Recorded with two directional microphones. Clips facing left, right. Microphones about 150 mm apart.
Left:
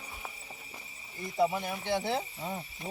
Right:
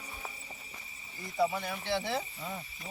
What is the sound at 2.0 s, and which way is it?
Speech, 30° left (ahead or behind).